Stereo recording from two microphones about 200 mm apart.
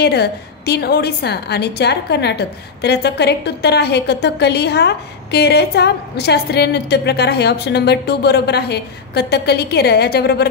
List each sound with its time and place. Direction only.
0.0 s a woman's voice: 55° left (ahead or behind)